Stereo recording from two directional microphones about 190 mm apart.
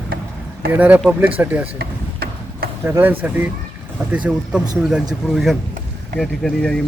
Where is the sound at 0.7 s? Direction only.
10° right (ahead or behind).